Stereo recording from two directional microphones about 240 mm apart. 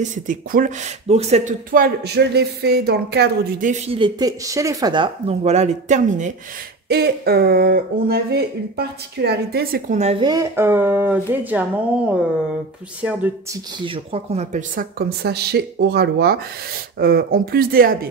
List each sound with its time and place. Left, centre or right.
0.0 s speech: right
6.9 s speech: right
10.2 s speech: centre
13.7 s speech: right